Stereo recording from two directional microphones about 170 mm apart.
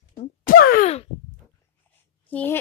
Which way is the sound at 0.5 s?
55° left (ahead or behind).